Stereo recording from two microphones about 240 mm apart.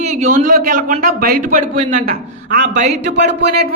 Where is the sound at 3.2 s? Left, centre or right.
Right.